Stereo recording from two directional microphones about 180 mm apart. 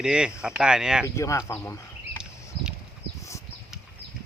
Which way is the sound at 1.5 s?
10° left (ahead or behind).